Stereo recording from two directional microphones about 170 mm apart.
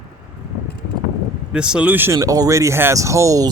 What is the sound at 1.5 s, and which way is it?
Speech, 5° right (ahead or behind).